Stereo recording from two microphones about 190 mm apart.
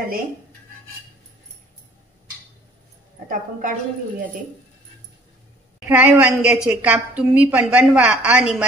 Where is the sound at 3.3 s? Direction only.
45° right (ahead or behind).